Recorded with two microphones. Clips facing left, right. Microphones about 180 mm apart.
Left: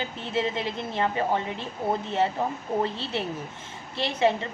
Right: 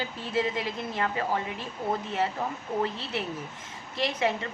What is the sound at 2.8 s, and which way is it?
A woman's voice, 30° left (ahead or behind).